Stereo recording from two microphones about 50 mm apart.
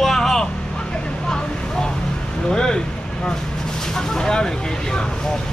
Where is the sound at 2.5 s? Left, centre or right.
Centre.